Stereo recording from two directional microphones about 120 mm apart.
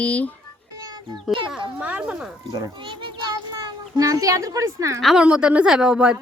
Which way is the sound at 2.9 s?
40° right (ahead or behind).